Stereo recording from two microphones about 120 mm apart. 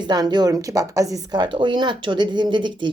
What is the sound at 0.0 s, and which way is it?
A woman's voice, 40° right (ahead or behind).